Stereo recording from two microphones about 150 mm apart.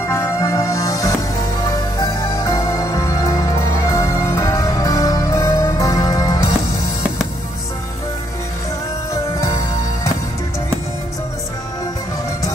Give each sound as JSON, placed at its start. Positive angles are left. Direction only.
{"t": 0.1, "sound": "music", "side_deg": 20}
{"t": 9.1, "sound": "music", "side_deg": 25}